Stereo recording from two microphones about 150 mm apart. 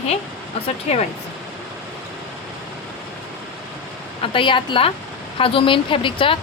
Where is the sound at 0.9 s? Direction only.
45° left (ahead or behind).